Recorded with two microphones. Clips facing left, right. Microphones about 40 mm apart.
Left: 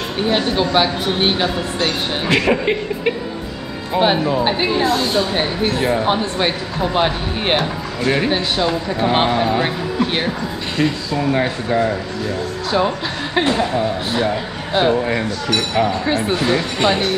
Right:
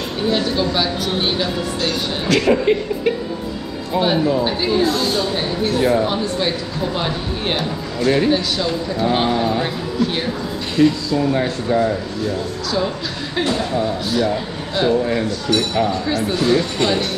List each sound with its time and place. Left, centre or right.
0.3 s speech: left
5.8 s speech: left
8.0 s speech: left
12.7 s speech: left